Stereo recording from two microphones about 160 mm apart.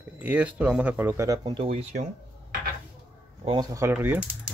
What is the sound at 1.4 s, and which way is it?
Speech, 30° right (ahead or behind).